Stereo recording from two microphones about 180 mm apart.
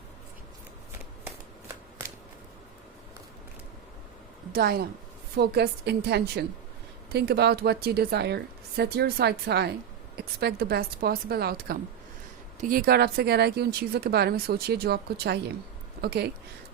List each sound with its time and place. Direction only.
4.5 s speech: 60° right (ahead or behind)